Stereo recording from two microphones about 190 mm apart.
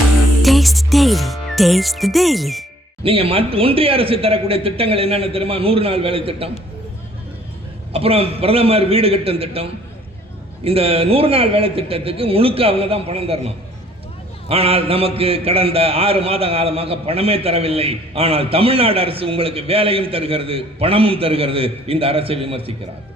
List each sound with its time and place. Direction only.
0.4 s music: centre (ahead or behind)
3.0 s speech: 30° right (ahead or behind)
7.9 s a man's voice: 30° right (ahead or behind)